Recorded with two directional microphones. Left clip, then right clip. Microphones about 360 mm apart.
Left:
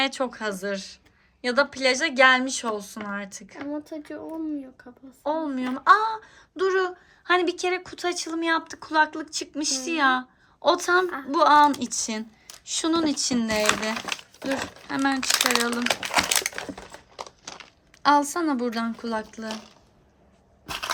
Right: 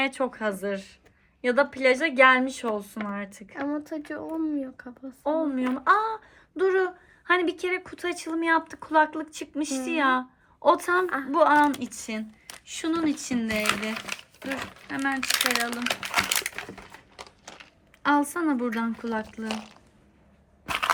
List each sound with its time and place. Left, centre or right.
0.0 s speech: centre
3.7 s speech: centre
5.2 s speech: centre
13.9 s speech: left
15.2 s a sound: left
18.0 s speech: centre